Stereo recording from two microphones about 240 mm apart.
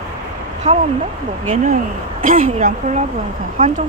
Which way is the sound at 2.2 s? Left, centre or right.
Right.